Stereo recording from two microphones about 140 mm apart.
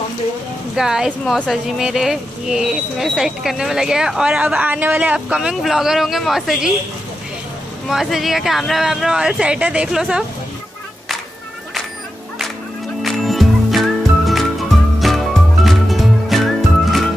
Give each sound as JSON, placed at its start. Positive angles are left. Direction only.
{"t": 0.7, "sound": "speech", "side_deg": -5}
{"t": 7.9, "sound": "speech", "side_deg": 0}
{"t": 13.0, "sound": "music", "side_deg": 0}